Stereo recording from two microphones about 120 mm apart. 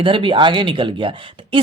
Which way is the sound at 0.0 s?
45° right (ahead or behind).